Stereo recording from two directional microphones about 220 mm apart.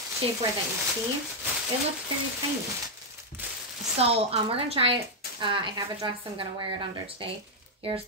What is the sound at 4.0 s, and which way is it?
A woman's voice, 25° right (ahead or behind).